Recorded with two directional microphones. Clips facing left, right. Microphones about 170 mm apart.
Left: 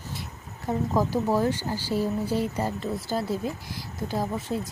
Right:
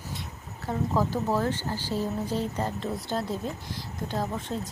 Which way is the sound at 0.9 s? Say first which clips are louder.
Left 2 dB; 10° left (ahead or behind).